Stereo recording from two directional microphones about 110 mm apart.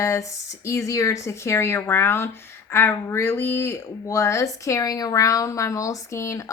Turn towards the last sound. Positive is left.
turn(degrees=30)  # may be behind; listen again after turning